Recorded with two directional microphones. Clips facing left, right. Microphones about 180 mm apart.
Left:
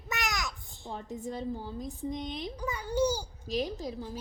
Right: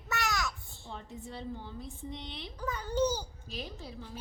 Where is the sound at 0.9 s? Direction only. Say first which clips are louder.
Left 6 dB; 40° left (ahead or behind).